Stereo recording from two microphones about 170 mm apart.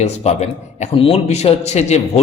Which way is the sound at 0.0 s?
40° left (ahead or behind).